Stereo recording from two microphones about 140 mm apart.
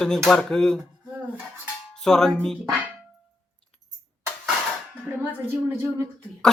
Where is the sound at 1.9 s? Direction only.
5° left (ahead or behind).